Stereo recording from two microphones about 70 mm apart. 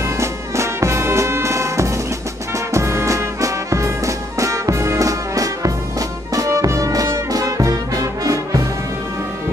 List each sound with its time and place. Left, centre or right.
0.2 s music: right